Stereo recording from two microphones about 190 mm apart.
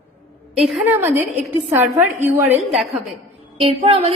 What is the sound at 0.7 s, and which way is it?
A woman's voice, 10° right (ahead or behind).